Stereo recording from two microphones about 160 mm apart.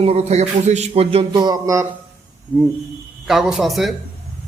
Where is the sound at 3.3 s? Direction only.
Centre (ahead or behind).